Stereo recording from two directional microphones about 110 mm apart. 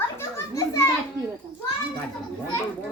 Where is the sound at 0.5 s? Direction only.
30° left (ahead or behind).